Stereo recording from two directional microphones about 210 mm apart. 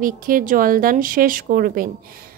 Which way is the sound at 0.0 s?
40° right (ahead or behind).